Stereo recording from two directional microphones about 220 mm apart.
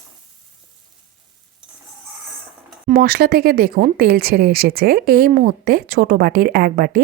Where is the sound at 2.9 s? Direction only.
40° right (ahead or behind).